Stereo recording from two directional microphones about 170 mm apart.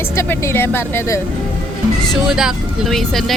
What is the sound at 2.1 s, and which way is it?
Speech, 5° right (ahead or behind).